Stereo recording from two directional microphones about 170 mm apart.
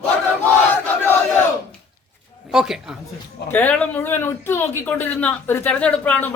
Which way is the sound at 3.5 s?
10° left (ahead or behind).